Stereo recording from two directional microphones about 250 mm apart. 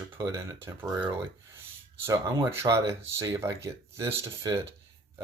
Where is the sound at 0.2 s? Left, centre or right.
Centre.